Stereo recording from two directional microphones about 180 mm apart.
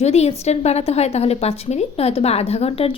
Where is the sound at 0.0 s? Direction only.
35° left (ahead or behind).